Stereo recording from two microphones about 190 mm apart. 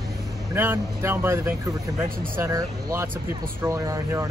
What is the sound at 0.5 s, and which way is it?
Speech, 10° right (ahead or behind).